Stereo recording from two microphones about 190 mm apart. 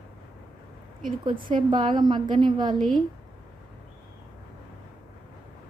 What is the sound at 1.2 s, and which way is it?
A woman's voice, 25° right (ahead or behind).